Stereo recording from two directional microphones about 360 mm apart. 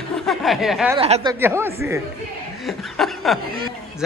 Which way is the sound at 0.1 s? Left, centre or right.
Centre.